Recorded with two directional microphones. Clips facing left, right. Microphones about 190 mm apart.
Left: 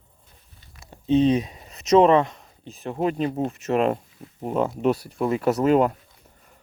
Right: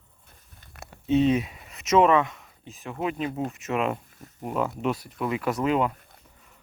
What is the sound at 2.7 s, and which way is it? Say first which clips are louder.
Speech: left 5 dB; 35° left (ahead or behind).